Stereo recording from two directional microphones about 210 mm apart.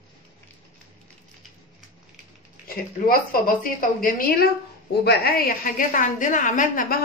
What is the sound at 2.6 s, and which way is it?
A woman's voice, 45° left (ahead or behind).